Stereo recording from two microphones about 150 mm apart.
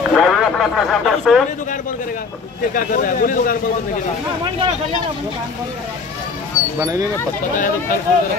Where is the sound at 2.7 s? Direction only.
65° left (ahead or behind).